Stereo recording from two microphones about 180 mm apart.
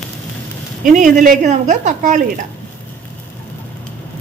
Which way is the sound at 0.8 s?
45° right (ahead or behind).